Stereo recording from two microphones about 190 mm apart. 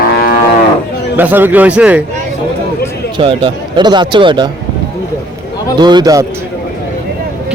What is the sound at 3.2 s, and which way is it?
A man's voice, 25° right (ahead or behind).